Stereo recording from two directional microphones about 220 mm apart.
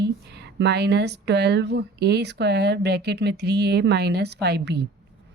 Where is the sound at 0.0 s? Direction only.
50° right (ahead or behind).